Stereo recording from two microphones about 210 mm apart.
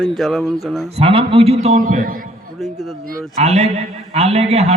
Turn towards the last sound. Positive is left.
turn(degrees=-30)  # may be behind; listen again after turning